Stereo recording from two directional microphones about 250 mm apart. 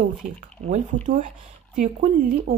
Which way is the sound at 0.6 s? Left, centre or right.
Right.